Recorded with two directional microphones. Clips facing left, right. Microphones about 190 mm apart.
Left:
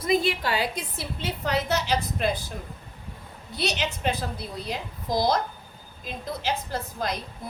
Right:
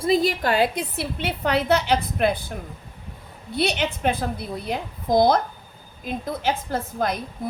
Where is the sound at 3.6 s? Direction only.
55° right (ahead or behind).